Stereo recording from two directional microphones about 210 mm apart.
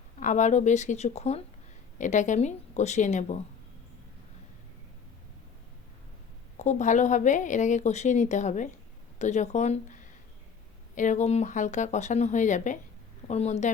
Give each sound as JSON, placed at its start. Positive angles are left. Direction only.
{"t": 0.2, "sound": "a woman's voice", "side_deg": 35}
{"t": 6.6, "sound": "a woman's voice", "side_deg": 35}